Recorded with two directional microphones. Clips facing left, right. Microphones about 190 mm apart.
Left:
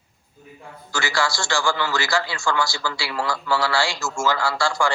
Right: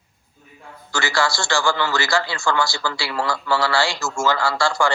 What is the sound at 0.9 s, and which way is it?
A man's voice, 60° right (ahead or behind).